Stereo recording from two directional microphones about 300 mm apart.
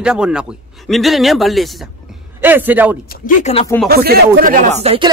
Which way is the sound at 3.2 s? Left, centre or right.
Left.